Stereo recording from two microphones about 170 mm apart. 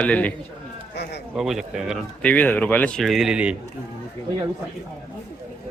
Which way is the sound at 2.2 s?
10° left (ahead or behind).